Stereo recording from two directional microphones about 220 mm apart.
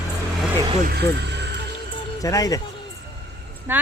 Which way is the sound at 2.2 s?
15° left (ahead or behind).